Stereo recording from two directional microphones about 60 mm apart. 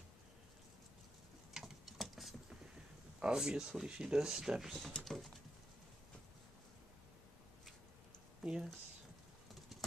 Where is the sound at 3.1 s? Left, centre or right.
Centre.